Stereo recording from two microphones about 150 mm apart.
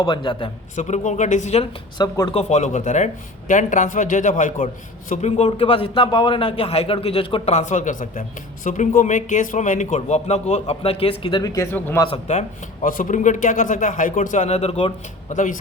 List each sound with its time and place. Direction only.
0.0 s a man's voice: 30° left (ahead or behind)
0.8 s speech: 50° left (ahead or behind)
2.0 s a man's voice: 30° left (ahead or behind)
2.4 s speech: 50° left (ahead or behind); by 12.0 s 15° left (ahead or behind)
12.0 s speech: 45° left (ahead or behind)
12.8 s speech: 65° left (ahead or behind); by 14.9 s 40° left (ahead or behind)
15.3 s speech: 55° left (ahead or behind)